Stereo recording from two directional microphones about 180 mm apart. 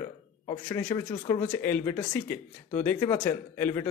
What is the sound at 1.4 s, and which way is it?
Speech, 10° left (ahead or behind).